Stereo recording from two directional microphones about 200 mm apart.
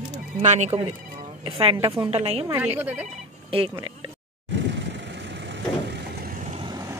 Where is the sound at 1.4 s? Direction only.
25° right (ahead or behind).